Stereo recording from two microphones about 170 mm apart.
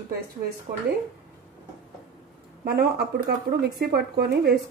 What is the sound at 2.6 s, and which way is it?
Speech, 65° right (ahead or behind).